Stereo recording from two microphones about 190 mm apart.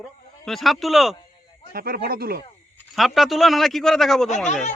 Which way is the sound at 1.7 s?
50° right (ahead or behind).